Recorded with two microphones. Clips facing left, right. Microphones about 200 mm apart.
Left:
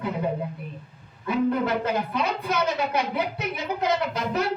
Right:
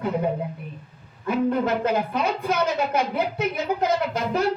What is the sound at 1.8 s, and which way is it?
A woman's voice, 50° right (ahead or behind).